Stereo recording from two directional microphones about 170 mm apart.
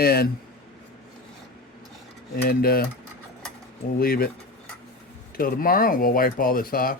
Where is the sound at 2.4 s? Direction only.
60° left (ahead or behind).